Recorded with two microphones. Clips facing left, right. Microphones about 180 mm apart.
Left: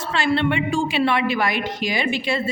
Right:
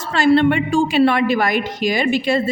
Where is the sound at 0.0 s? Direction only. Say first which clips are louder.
Right 7 dB; 40° right (ahead or behind).